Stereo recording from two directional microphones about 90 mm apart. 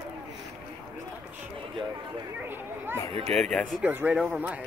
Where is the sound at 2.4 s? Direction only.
25° right (ahead or behind).